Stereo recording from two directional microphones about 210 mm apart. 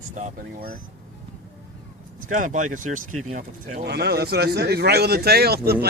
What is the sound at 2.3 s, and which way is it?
Speech, 35° right (ahead or behind).